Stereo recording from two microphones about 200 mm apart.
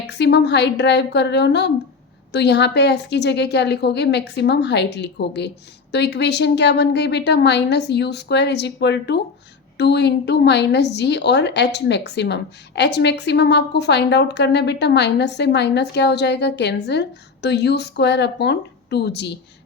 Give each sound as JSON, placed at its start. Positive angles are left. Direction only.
{"t": 0.1, "sound": "a woman's voice", "side_deg": 60}